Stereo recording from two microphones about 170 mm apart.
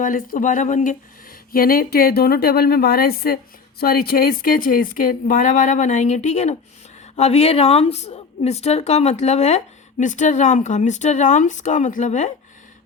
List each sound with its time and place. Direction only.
0.0 s speech: 55° left (ahead or behind)
1.5 s a woman's voice: 60° left (ahead or behind)